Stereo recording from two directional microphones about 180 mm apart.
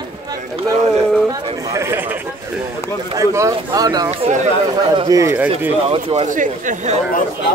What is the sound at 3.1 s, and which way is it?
Speech, 15° right (ahead or behind).